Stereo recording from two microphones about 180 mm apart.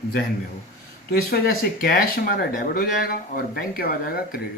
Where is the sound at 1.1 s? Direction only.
55° left (ahead or behind).